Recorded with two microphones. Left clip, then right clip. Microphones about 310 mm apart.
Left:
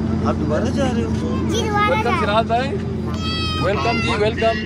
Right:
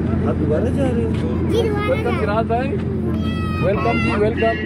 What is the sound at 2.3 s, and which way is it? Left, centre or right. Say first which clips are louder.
Speech: even; left.